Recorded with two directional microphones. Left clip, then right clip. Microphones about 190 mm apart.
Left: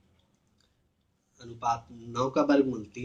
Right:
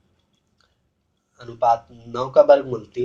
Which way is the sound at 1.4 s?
15° right (ahead or behind).